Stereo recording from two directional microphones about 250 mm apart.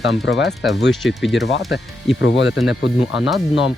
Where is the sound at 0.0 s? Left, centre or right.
Left.